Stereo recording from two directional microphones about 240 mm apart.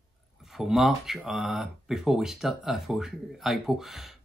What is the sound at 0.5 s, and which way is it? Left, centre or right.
Speech, centre.